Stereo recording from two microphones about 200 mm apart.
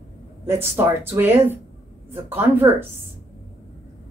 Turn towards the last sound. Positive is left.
turn(degrees=-10)  # may be behind; listen again after turning